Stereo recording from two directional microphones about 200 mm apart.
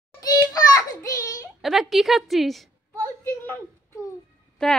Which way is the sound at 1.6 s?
Centre (ahead or behind).